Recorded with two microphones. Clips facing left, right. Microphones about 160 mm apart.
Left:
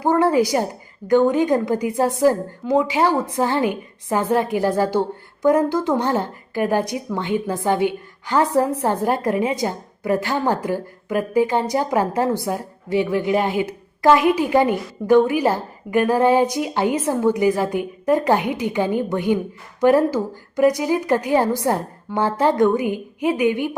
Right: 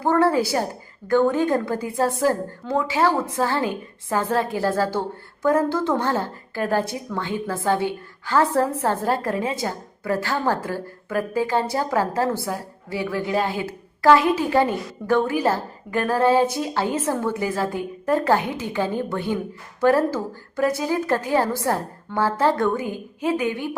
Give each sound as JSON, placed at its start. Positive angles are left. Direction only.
{"t": 0.0, "sound": "a woman's voice", "side_deg": 15}